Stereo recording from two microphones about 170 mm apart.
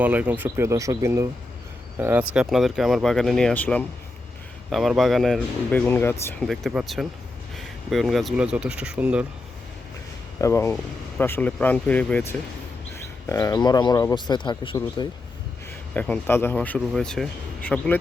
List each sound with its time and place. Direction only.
0.0 s speech: 10° right (ahead or behind); by 6.5 s 10° left (ahead or behind)
6.5 s speech: centre (ahead or behind)
10.3 s speech: 15° left (ahead or behind)
16.0 s speech: 10° left (ahead or behind)